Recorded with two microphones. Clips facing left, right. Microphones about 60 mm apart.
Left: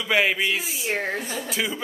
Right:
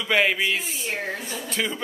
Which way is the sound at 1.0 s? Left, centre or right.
Left.